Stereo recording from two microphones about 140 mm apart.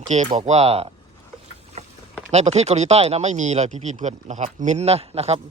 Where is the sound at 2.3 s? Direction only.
50° right (ahead or behind).